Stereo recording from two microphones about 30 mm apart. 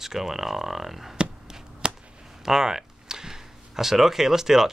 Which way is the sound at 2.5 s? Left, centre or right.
Centre.